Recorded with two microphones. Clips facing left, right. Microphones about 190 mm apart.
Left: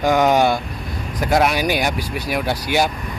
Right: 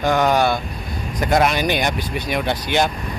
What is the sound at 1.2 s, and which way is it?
Speech, 5° left (ahead or behind).